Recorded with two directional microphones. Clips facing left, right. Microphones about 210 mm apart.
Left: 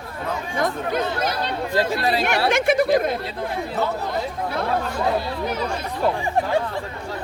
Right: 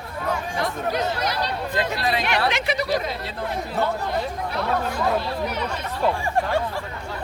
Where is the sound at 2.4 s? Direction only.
50° left (ahead or behind).